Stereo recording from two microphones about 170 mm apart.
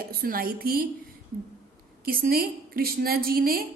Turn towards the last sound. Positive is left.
turn(degrees=-60)  # may be behind; listen again after turning